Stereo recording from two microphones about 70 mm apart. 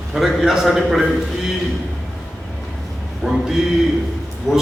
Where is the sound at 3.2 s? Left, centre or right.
Centre.